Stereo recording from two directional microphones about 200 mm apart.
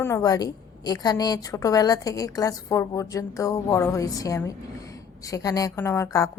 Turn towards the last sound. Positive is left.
turn(degrees=15)  # may be behind; listen again after turning